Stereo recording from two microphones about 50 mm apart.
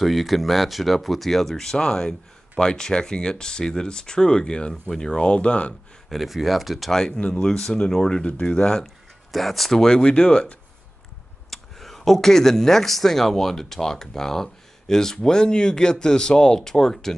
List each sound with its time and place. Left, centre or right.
0.0 s speech: centre; by 5.8 s left
6.0 s speech: centre
7.1 s speech: left
8.8 s speech: centre; by 10.6 s left
11.5 s speech: centre